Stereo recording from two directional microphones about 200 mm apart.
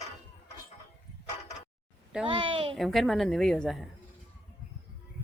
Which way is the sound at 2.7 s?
Centre (ahead or behind).